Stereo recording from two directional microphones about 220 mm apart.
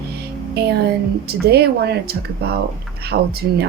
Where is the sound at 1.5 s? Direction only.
45° right (ahead or behind).